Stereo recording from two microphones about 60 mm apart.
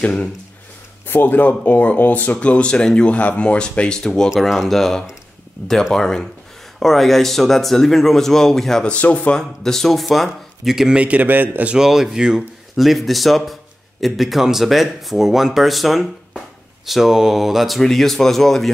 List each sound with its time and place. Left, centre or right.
0.0 s speech: centre
1.0 s speech: left; by 8.9 s centre
8.9 s speech: left
9.4 s speech: centre
11.0 s a man's voice: right
11.7 s speech: centre